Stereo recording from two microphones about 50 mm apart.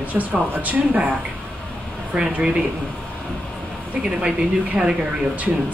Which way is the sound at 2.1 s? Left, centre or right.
Centre.